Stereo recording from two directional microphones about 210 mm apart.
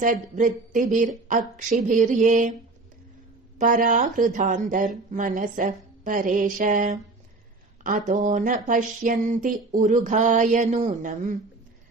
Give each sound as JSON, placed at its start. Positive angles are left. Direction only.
{"t": 0.0, "sound": "speech", "side_deg": -40}
{"t": 3.6, "sound": "speech", "side_deg": -40}